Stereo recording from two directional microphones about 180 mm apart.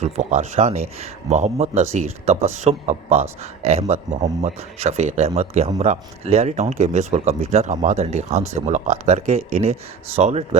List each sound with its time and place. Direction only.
0.0 s speech: 40° right (ahead or behind)